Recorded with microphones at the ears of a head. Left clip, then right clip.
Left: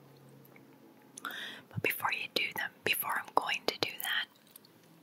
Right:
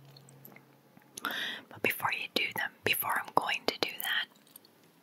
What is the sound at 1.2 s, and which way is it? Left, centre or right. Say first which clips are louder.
Whispering: right 6 dB; right.